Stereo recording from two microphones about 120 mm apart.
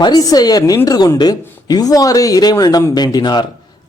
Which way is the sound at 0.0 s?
30° left (ahead or behind).